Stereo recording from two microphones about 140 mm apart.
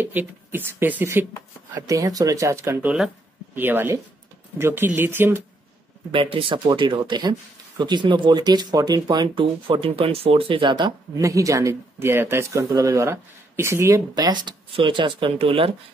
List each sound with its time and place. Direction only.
0.0 s speech: 15° right (ahead or behind)
6.1 s speech: 40° right (ahead or behind)